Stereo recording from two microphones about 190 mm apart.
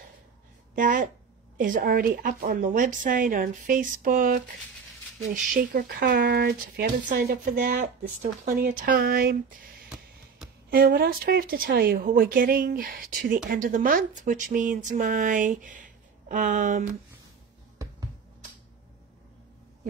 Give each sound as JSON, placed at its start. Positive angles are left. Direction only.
{"t": 0.7, "sound": "speech", "side_deg": -45}